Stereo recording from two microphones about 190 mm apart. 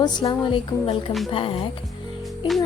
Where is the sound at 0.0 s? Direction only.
25° left (ahead or behind).